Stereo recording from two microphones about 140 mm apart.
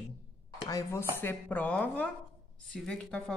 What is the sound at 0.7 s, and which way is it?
Speech, 25° left (ahead or behind).